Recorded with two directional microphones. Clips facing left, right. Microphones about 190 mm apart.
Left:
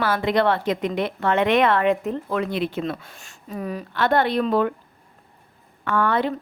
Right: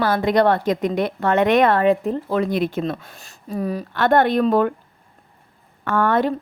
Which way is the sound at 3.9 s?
50° right (ahead or behind).